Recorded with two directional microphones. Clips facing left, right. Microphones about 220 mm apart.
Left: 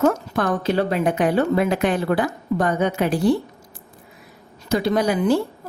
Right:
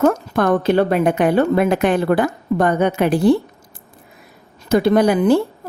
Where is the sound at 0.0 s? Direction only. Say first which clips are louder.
Right 3 dB; 55° right (ahead or behind).